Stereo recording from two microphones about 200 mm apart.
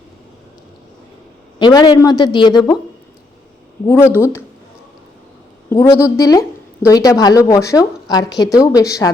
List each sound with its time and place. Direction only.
1.5 s a woman's voice: 20° left (ahead or behind)
3.8 s a woman's voice: 10° left (ahead or behind)
5.6 s a man's voice: 15° left (ahead or behind)